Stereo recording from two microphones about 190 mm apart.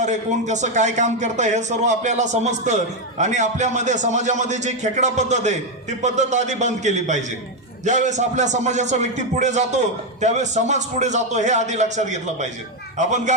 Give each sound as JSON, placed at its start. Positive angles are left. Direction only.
{"t": 0.0, "sound": "speech", "side_deg": -40}